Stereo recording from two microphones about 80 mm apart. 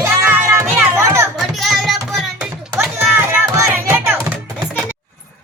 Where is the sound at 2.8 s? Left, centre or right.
Right.